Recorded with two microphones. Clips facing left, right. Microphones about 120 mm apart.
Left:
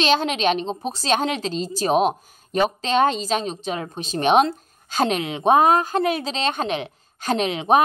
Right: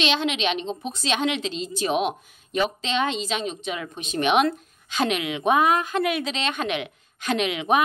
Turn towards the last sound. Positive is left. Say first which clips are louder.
# left 4 dB
turn(degrees=35)  # may be behind; listen again after turning